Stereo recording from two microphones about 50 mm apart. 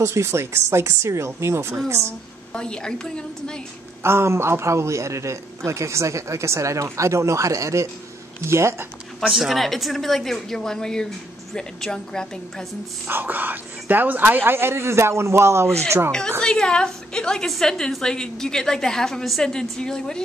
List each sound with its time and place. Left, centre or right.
0.0 s a man's voice: right
2.5 s a woman's voice: centre
4.0 s a man's voice: right
8.5 s speech: right
9.3 s a woman's voice: centre
13.0 s speech: right
16.1 s a woman's voice: centre